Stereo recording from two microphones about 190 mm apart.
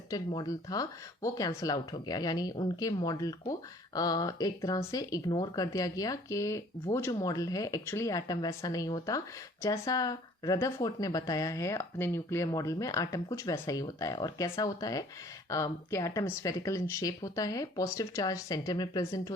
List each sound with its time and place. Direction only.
0.1 s speech: 20° left (ahead or behind)